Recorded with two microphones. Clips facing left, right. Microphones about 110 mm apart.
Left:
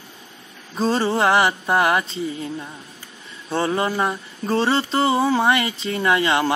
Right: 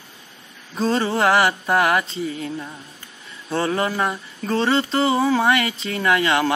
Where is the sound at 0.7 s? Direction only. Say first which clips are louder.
Left 1 dB; 30° left (ahead or behind).